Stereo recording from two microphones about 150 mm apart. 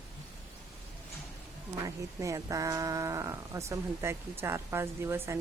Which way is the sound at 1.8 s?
20° right (ahead or behind).